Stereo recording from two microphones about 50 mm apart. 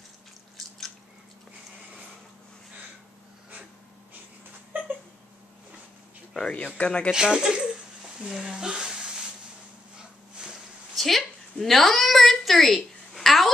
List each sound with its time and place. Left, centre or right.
0.6 s drip: centre
6.4 s speech: left
7.1 s speech: centre
11.0 s a sound: centre